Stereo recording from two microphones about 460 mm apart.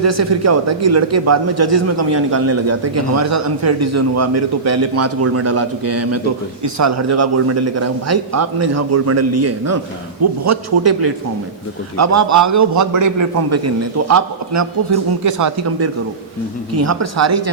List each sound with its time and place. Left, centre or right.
0.0 s a man's voice: right